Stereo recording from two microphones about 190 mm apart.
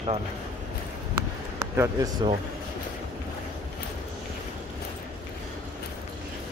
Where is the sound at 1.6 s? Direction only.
15° right (ahead or behind).